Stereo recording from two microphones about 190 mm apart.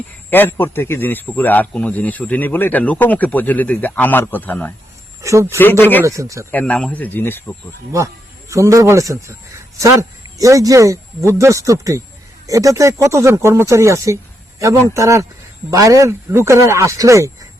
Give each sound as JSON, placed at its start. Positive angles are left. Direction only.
{"t": 0.3, "sound": "speech", "side_deg": 10}
{"t": 5.2, "sound": "speech", "side_deg": -15}
{"t": 5.8, "sound": "speech", "side_deg": 10}
{"t": 6.1, "sound": "speech", "side_deg": -15}
{"t": 6.5, "sound": "speech", "side_deg": 5}
{"t": 7.9, "sound": "speech", "side_deg": -15}